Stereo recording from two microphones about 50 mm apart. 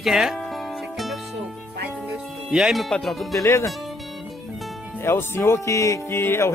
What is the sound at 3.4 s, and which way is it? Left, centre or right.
Speech, left.